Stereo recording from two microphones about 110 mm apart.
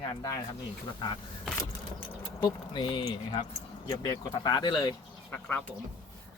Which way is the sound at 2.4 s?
45° left (ahead or behind).